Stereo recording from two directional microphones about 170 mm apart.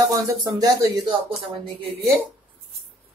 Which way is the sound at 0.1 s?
20° right (ahead or behind).